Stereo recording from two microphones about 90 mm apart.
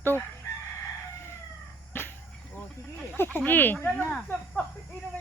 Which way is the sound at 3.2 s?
20° left (ahead or behind).